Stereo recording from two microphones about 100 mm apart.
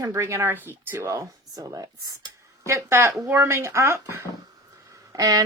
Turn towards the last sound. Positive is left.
turn(degrees=-35)  # may be behind; listen again after turning